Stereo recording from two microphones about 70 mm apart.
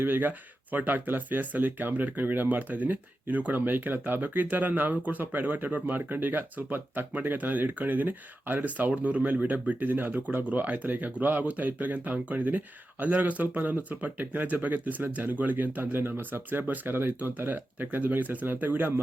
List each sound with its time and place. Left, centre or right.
0.0 s speech: right